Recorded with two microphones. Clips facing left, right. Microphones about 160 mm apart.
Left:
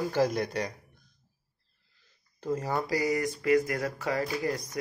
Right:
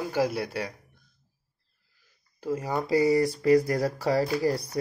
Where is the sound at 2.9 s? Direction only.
30° right (ahead or behind).